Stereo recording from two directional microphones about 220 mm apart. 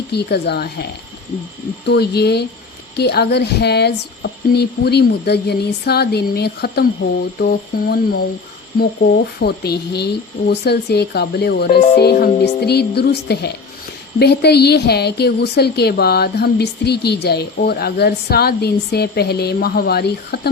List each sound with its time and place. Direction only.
0.1 s a woman's voice: 50° left (ahead or behind)
1.9 s a woman's voice: 45° left (ahead or behind)